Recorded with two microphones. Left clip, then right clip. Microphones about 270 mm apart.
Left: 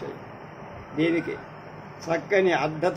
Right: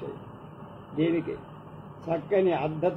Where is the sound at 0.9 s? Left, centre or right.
Left.